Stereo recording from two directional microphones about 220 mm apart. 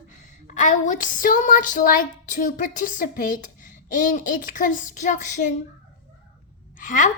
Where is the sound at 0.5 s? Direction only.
35° left (ahead or behind).